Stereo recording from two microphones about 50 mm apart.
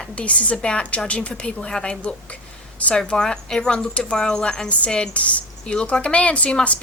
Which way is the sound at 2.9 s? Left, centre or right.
Centre.